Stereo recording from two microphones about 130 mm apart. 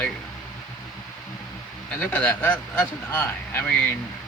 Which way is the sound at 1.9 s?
10° left (ahead or behind).